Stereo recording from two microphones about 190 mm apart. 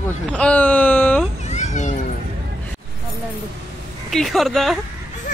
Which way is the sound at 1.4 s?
40° left (ahead or behind).